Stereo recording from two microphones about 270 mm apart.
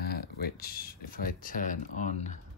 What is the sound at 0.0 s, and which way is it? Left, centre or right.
Speech, left.